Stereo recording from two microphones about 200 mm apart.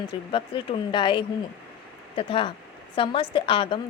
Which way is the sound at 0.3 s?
25° left (ahead or behind).